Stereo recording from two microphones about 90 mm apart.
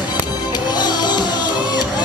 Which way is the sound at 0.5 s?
50° left (ahead or behind).